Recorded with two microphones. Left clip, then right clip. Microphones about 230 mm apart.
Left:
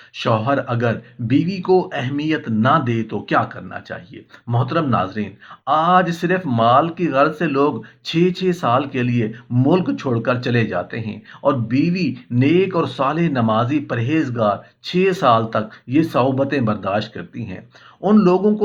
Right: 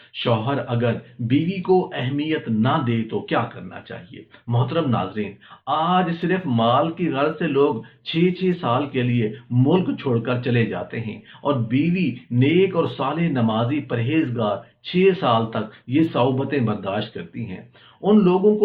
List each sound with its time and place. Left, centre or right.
0.2 s speech: left
4.5 s speech: left